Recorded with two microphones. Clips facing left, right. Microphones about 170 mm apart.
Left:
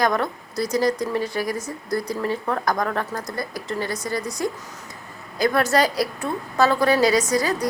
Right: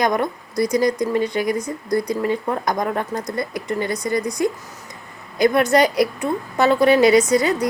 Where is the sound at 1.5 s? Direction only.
5° left (ahead or behind).